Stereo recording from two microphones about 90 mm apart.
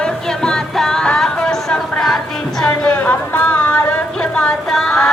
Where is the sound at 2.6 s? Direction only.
10° left (ahead or behind).